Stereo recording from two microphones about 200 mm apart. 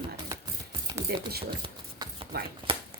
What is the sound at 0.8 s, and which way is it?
Speech, 20° right (ahead or behind).